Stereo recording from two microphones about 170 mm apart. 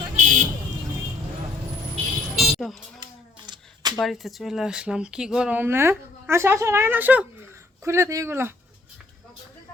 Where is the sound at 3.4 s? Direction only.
25° right (ahead or behind).